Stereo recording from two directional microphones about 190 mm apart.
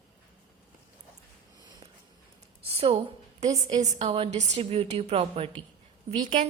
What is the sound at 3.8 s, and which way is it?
A woman's voice, 35° right (ahead or behind).